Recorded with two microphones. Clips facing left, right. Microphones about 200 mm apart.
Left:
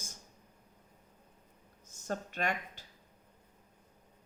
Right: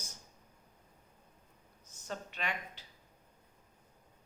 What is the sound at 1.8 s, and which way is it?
Speech, 45° left (ahead or behind).